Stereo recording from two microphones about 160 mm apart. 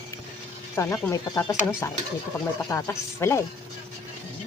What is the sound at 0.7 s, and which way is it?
Speech, 15° left (ahead or behind).